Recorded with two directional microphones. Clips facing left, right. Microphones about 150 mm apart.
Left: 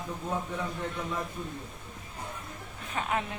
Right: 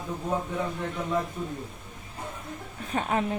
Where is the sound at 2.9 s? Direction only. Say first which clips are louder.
Right 4 dB; 35° right (ahead or behind).